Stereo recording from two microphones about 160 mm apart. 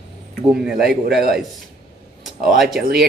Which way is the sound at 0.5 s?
5° right (ahead or behind).